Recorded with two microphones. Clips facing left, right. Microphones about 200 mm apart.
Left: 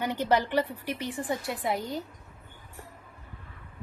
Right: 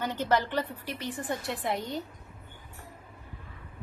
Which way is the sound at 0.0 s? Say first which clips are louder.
Left 2 dB; 15° left (ahead or behind).